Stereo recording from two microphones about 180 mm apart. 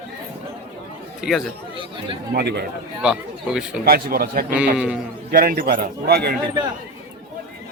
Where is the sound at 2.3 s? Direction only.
65° right (ahead or behind).